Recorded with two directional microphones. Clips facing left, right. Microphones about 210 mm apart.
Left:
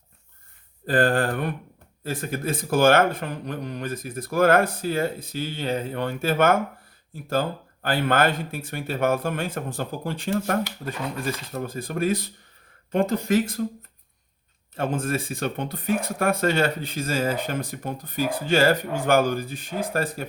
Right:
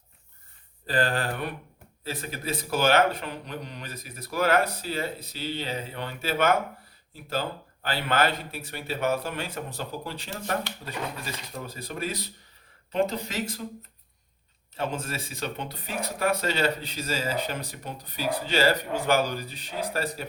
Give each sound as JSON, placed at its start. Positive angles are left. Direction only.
{"t": 0.9, "sound": "speech", "side_deg": 50}
{"t": 14.8, "sound": "speech", "side_deg": 50}